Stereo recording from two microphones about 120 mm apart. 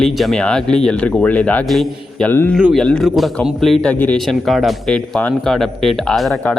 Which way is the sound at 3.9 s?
15° left (ahead or behind).